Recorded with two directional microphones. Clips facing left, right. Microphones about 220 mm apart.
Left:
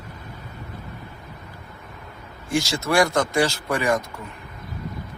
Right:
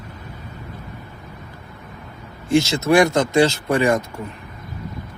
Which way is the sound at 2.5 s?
25° right (ahead or behind).